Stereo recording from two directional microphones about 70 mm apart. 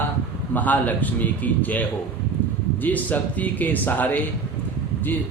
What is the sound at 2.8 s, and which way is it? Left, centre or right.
A man's voice, left.